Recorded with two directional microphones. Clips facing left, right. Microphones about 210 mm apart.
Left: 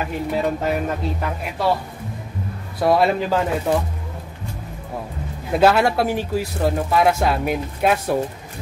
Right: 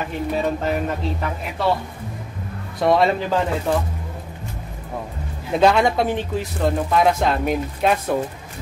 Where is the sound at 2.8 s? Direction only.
5° left (ahead or behind).